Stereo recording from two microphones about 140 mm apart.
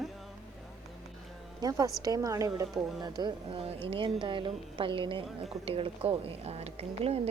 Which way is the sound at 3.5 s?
40° right (ahead or behind).